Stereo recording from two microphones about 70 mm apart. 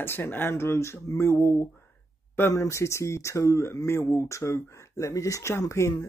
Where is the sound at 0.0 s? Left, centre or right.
Left.